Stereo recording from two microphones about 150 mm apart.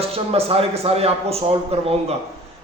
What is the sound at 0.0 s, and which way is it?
A man's voice, 40° right (ahead or behind).